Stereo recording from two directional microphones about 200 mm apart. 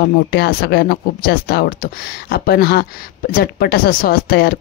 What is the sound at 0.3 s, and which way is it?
A woman's voice, 50° left (ahead or behind).